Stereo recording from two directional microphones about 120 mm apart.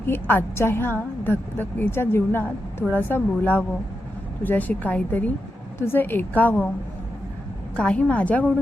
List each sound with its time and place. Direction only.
0.0 s a woman's voice: 15° left (ahead or behind)
7.8 s speech: 10° left (ahead or behind)